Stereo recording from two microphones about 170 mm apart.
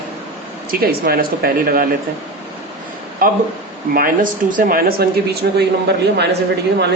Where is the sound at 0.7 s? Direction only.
60° right (ahead or behind).